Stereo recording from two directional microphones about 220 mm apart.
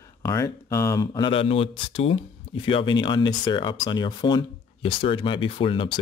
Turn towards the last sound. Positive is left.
turn(degrees=25)  # may be behind; listen again after turning